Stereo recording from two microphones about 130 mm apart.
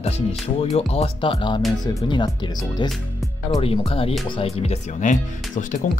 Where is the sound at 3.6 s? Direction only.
50° left (ahead or behind); by 5.6 s 70° left (ahead or behind).